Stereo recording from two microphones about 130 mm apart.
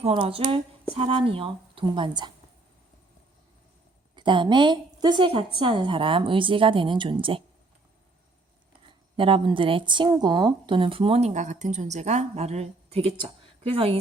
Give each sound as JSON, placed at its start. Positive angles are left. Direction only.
{"t": 0.1, "sound": "a woman's voice", "side_deg": -45}
{"t": 4.1, "sound": "a woman's voice", "side_deg": -35}
{"t": 8.9, "sound": "a woman's voice", "side_deg": -40}